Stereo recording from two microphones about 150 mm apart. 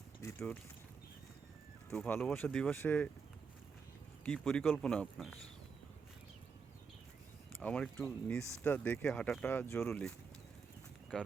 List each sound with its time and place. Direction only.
0.2 s boat: 20° left (ahead or behind)
1.9 s speech: 10° left (ahead or behind)
4.2 s speech: 5° left (ahead or behind)
7.6 s speech: 10° left (ahead or behind)